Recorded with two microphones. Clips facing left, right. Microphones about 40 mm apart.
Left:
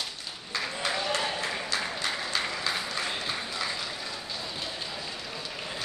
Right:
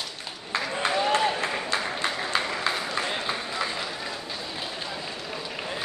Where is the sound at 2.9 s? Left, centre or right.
Right.